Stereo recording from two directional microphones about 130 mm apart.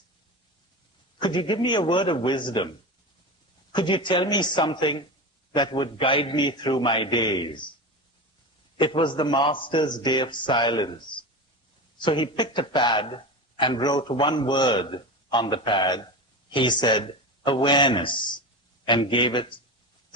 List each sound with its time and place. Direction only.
1.2 s speech: 35° left (ahead or behind)
3.7 s speech: 35° left (ahead or behind)
8.8 s speech: 40° left (ahead or behind)